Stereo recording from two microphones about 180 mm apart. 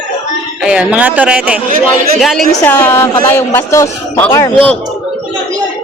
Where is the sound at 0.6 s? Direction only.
5° right (ahead or behind).